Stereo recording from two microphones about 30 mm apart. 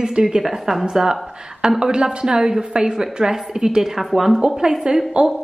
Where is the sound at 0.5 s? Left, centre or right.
Centre.